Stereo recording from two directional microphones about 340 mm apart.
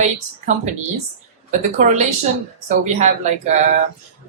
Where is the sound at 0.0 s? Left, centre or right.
Right.